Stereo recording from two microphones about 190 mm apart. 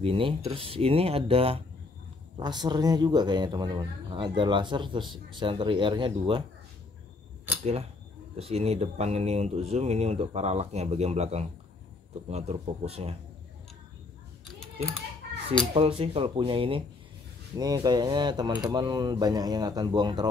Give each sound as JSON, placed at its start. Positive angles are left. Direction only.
{"t": 0.0, "sound": "speech", "side_deg": -30}
{"t": 8.4, "sound": "speech", "side_deg": -30}
{"t": 15.7, "sound": "speech", "side_deg": -30}